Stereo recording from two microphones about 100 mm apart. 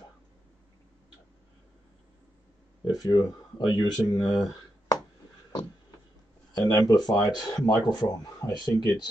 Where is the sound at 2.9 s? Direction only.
40° left (ahead or behind).